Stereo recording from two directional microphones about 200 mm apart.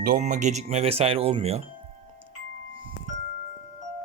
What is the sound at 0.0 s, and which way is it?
Speech, 40° right (ahead or behind).